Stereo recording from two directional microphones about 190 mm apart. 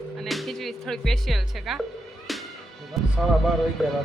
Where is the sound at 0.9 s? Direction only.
Centre (ahead or behind).